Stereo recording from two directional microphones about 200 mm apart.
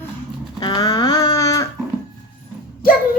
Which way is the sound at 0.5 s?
20° left (ahead or behind).